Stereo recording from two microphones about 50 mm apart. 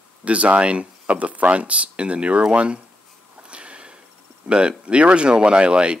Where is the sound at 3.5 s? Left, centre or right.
Right.